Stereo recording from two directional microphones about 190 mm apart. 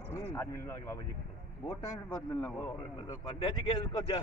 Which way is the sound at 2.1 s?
10° left (ahead or behind).